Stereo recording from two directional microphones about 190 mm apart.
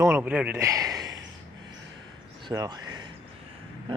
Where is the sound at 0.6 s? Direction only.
15° right (ahead or behind).